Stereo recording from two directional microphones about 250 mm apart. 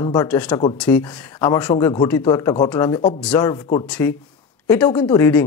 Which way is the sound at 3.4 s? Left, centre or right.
Centre.